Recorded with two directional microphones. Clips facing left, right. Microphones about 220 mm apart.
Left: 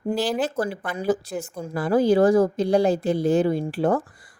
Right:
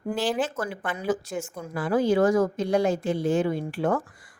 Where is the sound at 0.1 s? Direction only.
35° left (ahead or behind).